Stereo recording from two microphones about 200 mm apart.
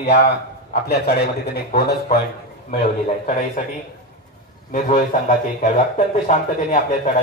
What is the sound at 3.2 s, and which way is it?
Speech, 40° left (ahead or behind).